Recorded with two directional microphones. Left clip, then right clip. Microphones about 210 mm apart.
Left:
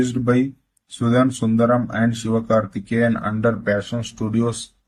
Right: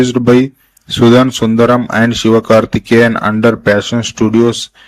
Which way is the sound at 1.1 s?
45° right (ahead or behind).